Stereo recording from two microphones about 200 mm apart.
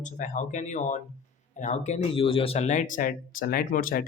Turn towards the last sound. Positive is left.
turn(degrees=45)  # may be behind; listen again after turning